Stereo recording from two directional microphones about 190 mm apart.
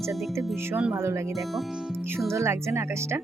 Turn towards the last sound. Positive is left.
turn(degrees=-15)  # may be behind; listen again after turning